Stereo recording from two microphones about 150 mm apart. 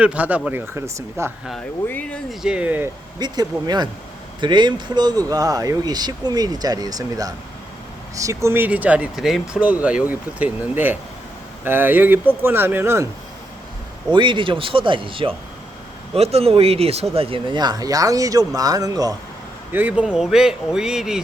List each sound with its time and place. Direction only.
0.0 s speech: 10° right (ahead or behind)
1.9 s speech: 10° left (ahead or behind); by 2.9 s 10° right (ahead or behind)
3.2 s speech: 30° right (ahead or behind)
14.1 s speech: 30° right (ahead or behind)
19.7 s speech: 10° right (ahead or behind)